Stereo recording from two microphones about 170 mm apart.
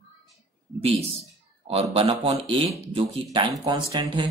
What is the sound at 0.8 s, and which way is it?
A man's voice, 35° right (ahead or behind).